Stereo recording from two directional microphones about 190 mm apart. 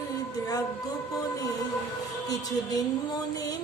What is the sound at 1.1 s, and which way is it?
A woman's voice, 20° left (ahead or behind).